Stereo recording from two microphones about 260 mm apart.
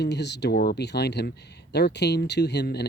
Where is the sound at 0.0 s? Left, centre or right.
Left.